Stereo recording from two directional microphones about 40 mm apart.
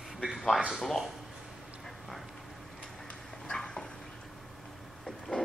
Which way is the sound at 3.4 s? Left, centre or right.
Centre.